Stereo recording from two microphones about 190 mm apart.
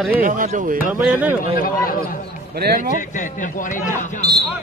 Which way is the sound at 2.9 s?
40° left (ahead or behind).